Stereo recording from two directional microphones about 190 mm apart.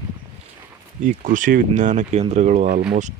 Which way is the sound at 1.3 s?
45° right (ahead or behind).